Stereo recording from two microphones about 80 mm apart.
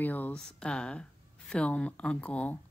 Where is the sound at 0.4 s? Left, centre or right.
Centre.